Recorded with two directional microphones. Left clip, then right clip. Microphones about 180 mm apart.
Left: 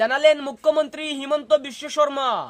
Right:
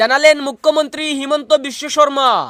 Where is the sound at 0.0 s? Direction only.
25° right (ahead or behind).